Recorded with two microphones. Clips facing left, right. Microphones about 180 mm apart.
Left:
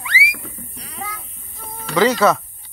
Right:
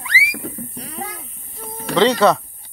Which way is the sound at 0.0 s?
40° right (ahead or behind).